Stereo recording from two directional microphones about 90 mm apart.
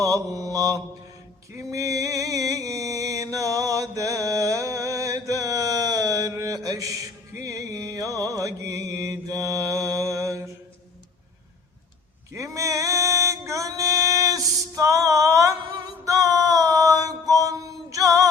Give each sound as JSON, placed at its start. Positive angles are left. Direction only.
{"t": 0.0, "sound": "mantra", "side_deg": -40}
{"t": 1.5, "sound": "music", "side_deg": -35}
{"t": 12.3, "sound": "a sound", "side_deg": -35}